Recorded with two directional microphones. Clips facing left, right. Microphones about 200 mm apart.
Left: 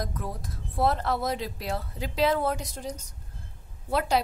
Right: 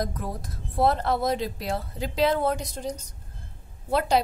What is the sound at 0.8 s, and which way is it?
Speech, 25° right (ahead or behind).